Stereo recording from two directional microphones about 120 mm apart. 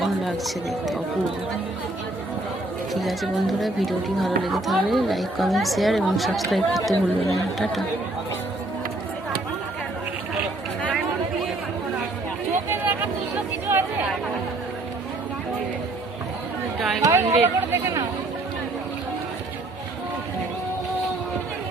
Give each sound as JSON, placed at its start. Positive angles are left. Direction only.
{"t": 0.0, "sound": "speech", "side_deg": 0}
{"t": 2.9, "sound": "speech", "side_deg": 0}
{"t": 12.7, "sound": "a sound", "side_deg": -15}
{"t": 13.7, "sound": "chatter", "side_deg": -15}
{"t": 17.0, "sound": "a sound", "side_deg": -25}
{"t": 17.4, "sound": "chatter", "side_deg": -20}